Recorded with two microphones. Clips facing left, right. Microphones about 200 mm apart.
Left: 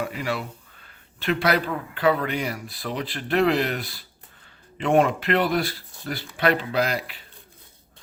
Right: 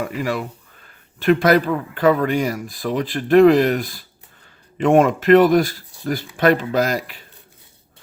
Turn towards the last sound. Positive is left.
turn(degrees=-45)  # may be behind; listen again after turning